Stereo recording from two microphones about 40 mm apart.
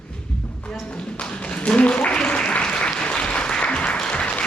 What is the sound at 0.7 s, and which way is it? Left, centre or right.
Tap, left.